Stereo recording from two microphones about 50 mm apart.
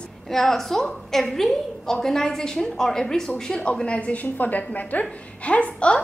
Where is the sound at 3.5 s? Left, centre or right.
Left.